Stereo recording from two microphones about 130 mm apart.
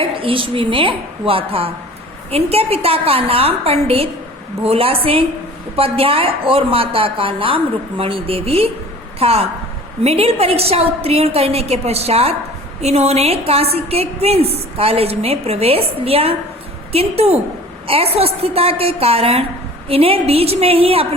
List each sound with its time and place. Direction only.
0.0 s a woman's voice: 45° right (ahead or behind)